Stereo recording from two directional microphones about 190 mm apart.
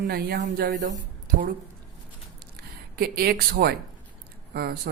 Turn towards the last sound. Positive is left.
turn(degrees=-55)  # may be behind; listen again after turning